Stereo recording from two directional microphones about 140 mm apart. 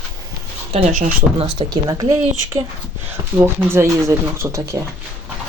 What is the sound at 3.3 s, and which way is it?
Speech, 15° right (ahead or behind).